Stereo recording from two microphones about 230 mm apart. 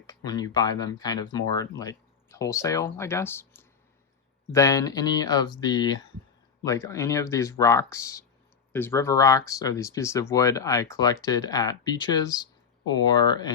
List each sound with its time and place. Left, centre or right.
0.1 s speech: centre